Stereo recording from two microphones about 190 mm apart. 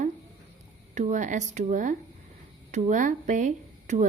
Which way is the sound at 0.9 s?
40° right (ahead or behind).